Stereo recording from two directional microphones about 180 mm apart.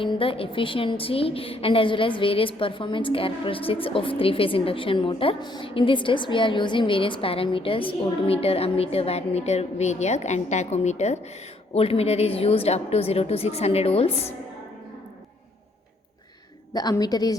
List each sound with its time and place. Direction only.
0.0 s a woman's voice: 30° left (ahead or behind)
16.7 s a woman's voice: 20° left (ahead or behind)